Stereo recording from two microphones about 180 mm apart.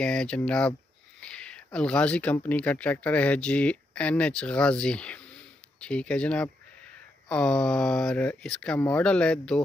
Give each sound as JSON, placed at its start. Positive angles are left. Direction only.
{"t": 0.0, "sound": "speech", "side_deg": 5}